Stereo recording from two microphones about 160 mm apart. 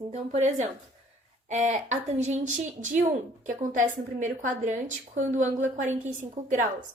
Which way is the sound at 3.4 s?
55° right (ahead or behind).